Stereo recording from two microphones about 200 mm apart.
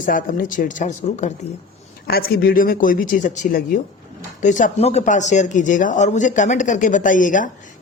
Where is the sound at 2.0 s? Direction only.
50° left (ahead or behind).